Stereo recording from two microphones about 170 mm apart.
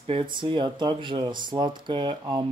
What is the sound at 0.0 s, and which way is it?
Speech, 30° right (ahead or behind).